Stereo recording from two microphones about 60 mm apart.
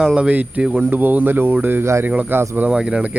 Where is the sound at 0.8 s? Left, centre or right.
Right.